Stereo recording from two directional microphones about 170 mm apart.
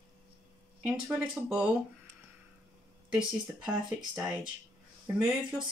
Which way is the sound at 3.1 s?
5° right (ahead or behind).